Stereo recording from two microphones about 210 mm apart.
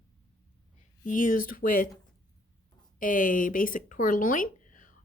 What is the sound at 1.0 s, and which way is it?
Speech, 40° left (ahead or behind).